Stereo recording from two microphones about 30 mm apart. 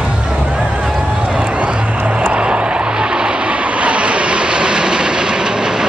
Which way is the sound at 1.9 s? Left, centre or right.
Right.